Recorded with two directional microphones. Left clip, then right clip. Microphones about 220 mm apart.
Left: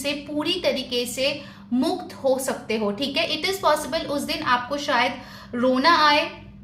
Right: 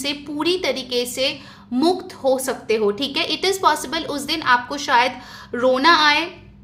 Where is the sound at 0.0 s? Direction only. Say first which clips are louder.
Right 3 dB; 40° right (ahead or behind).